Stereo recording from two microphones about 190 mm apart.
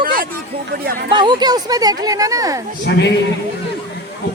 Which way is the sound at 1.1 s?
25° right (ahead or behind).